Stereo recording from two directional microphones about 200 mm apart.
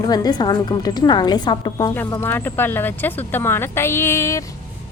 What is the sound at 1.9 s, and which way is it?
A woman's voice, 10° left (ahead or behind).